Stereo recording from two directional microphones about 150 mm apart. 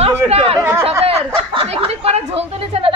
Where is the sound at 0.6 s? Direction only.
15° right (ahead or behind).